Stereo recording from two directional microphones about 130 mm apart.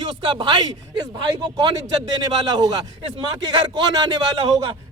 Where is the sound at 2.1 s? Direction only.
30° right (ahead or behind).